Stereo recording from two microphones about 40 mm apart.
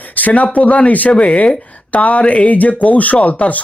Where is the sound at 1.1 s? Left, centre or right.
Left.